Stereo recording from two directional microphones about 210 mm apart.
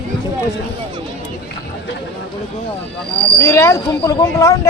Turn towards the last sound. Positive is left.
turn(degrees=15)  # may be behind; listen again after turning